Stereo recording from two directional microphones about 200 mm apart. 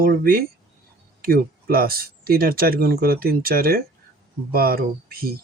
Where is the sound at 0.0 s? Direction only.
45° right (ahead or behind).